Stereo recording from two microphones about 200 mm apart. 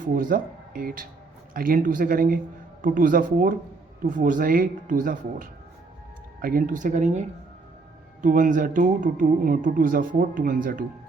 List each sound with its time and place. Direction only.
0.0 s speech: 45° right (ahead or behind)
8.2 s speech: 40° right (ahead or behind)